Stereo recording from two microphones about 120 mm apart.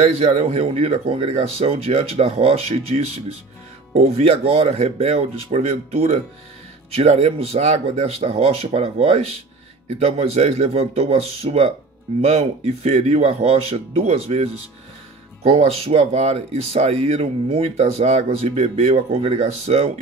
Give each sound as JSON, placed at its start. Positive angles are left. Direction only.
{"t": 0.0, "sound": "speech", "side_deg": -60}